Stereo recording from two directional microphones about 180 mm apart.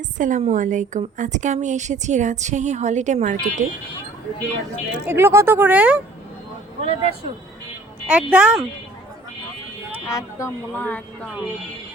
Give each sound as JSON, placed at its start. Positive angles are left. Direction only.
{"t": 0.2, "sound": "a woman's voice", "side_deg": -45}
{"t": 5.0, "sound": "speech", "side_deg": -15}
{"t": 6.8, "sound": "a woman's voice", "side_deg": -30}
{"t": 8.0, "sound": "speech", "side_deg": -5}
{"t": 10.1, "sound": "speech", "side_deg": 15}